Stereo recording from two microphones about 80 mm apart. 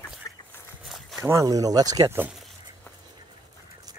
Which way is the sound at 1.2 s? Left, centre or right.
Right.